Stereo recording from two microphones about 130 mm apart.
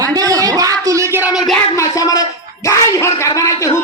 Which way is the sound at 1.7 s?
25° left (ahead or behind).